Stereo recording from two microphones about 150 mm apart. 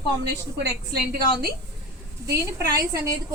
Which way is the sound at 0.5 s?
90° right.